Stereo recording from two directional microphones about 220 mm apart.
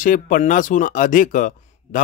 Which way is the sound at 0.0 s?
35° left (ahead or behind).